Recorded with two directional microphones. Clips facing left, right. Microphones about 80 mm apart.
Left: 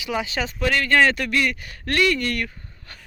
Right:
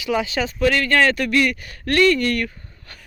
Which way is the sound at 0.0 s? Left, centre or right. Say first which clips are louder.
Right 4 dB; centre.